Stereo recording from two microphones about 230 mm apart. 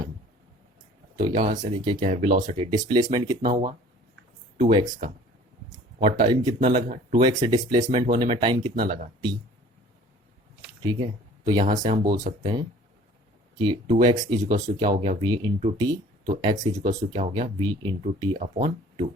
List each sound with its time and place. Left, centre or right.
1.2 s speech: right
7.9 s speech: right
8.7 s speech: right
10.8 s speech: centre
14.0 s speech: right
18.3 s speech: right